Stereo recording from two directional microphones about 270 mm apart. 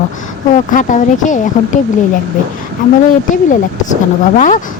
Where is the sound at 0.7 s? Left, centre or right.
Left.